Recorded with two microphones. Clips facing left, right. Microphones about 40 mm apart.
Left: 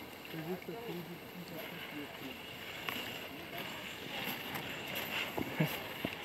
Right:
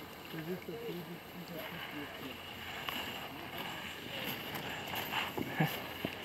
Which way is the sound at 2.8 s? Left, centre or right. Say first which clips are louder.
Even; centre.